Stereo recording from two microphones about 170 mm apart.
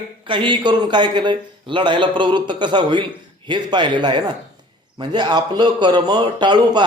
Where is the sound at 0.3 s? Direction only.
30° right (ahead or behind).